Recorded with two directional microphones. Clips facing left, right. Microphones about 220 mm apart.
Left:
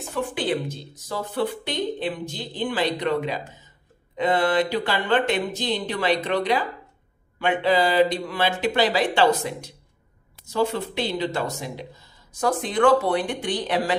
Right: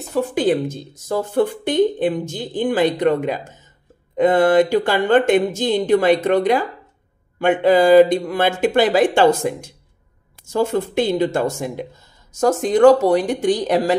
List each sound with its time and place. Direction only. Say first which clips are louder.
0.1 s speech: right 8 dB; 40° right (ahead or behind)